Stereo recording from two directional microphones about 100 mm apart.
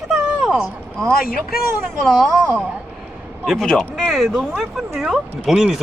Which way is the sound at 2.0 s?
5° left (ahead or behind).